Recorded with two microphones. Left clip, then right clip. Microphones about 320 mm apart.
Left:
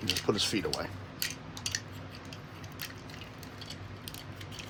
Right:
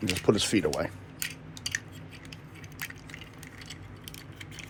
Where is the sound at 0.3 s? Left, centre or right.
Right.